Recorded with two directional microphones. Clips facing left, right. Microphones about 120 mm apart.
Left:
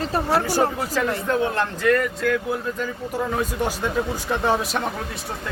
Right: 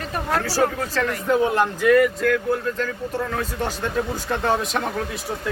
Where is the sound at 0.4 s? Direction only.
15° left (ahead or behind).